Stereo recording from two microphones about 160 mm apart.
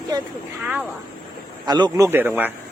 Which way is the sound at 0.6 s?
10° right (ahead or behind).